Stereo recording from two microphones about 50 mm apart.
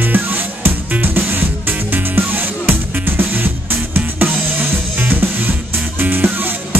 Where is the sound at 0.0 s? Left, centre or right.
Right.